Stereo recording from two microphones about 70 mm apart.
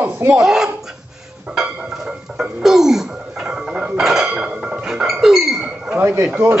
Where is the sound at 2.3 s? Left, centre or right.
Centre.